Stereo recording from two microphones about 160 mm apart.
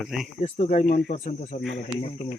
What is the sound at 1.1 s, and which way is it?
Speech, 40° left (ahead or behind).